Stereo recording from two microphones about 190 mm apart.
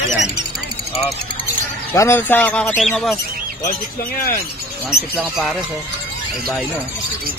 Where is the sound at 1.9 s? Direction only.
10° left (ahead or behind).